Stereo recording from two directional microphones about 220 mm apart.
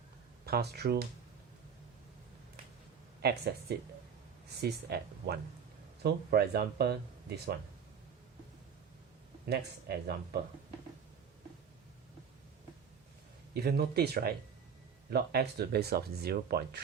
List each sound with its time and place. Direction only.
0.4 s speech: 45° right (ahead or behind)
3.2 s speech: 45° right (ahead or behind)
9.9 s speech: 45° right (ahead or behind)
13.5 s speech: 45° right (ahead or behind)